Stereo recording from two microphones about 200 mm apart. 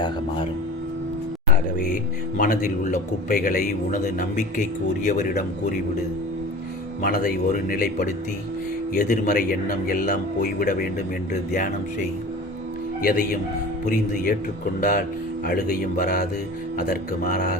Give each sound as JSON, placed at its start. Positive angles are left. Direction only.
{"t": 2.4, "sound": "a man's voice", "side_deg": 40}
{"t": 7.0, "sound": "a man's voice", "side_deg": 50}
{"t": 13.1, "sound": "a man's voice", "side_deg": 45}